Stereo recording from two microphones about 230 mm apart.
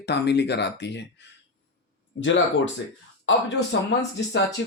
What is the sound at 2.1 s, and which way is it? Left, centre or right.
Speech, left.